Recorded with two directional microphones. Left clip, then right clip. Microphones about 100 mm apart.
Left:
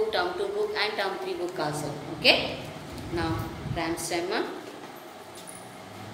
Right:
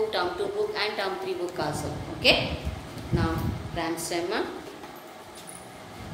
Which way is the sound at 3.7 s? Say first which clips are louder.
Even; 30° right (ahead or behind).